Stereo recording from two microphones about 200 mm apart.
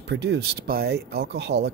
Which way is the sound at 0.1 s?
60° right (ahead or behind).